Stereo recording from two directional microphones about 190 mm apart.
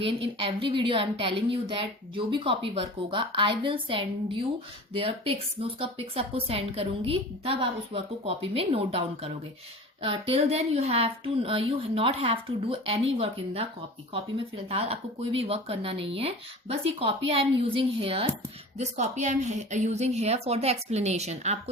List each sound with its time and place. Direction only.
0.0 s a woman's voice: 30° right (ahead or behind)
14.7 s speech: 30° right (ahead or behind)